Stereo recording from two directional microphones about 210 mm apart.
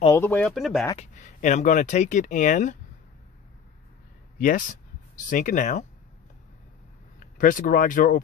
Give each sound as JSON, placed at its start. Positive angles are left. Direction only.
{"t": 0.1, "sound": "speech", "side_deg": 10}
{"t": 0.9, "sound": "speech", "side_deg": 35}
{"t": 4.4, "sound": "speech", "side_deg": 40}
{"t": 7.3, "sound": "speech", "side_deg": 40}